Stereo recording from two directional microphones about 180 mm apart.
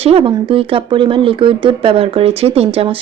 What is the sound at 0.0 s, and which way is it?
Speech, 30° right (ahead or behind).